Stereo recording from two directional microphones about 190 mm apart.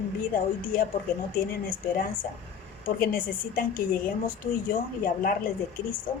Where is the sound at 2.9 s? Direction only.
50° left (ahead or behind).